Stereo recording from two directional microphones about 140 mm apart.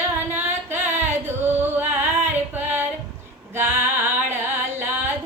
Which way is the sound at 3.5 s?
15° right (ahead or behind).